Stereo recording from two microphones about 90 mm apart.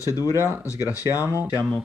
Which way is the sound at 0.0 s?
40° left (ahead or behind).